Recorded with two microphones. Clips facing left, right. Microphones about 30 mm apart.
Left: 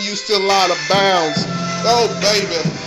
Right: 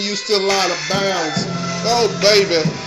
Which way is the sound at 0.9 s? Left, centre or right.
Left.